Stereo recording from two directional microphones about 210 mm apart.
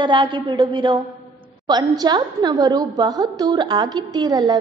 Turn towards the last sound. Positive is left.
turn(degrees=-20)  # may be behind; listen again after turning